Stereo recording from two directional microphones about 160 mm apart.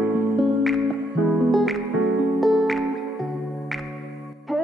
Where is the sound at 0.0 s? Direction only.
5° right (ahead or behind).